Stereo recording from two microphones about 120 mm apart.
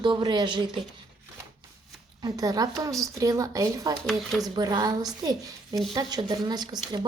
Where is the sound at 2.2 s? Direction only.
30° right (ahead or behind).